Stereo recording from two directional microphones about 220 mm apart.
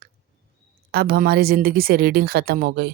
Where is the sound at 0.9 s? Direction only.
45° right (ahead or behind).